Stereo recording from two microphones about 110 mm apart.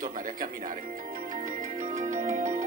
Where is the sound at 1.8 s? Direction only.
90° right.